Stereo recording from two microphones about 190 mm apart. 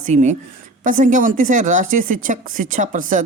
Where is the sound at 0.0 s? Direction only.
40° right (ahead or behind).